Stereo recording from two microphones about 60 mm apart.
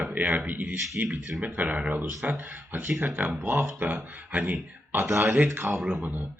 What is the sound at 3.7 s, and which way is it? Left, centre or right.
Speech, right.